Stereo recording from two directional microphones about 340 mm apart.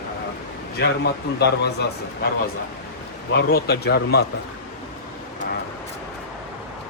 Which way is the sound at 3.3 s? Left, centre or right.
Left.